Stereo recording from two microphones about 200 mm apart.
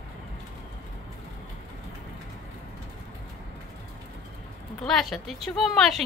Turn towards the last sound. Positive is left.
turn(degrees=0)  # may be behind; listen again after turning